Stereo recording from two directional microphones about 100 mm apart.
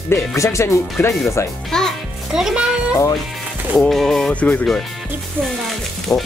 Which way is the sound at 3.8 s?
Centre (ahead or behind).